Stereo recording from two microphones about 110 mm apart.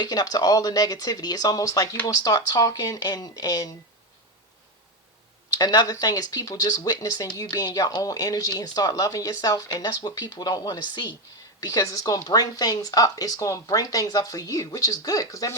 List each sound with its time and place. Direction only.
0.0 s speech: 35° left (ahead or behind)
5.5 s speech: 35° left (ahead or behind)